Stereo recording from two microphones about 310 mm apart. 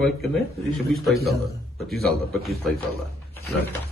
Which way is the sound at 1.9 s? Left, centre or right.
Centre.